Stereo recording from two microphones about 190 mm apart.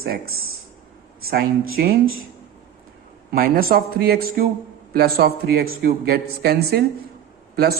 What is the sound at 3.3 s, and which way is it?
A man's voice, 50° right (ahead or behind).